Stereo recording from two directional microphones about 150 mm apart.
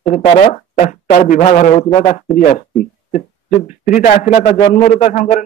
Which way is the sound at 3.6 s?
55° left (ahead or behind).